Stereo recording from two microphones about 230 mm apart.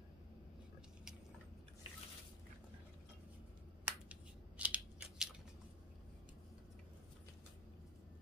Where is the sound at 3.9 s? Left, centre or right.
Centre.